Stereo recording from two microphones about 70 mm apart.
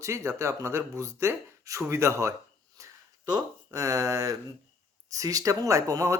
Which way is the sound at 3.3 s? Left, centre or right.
Right.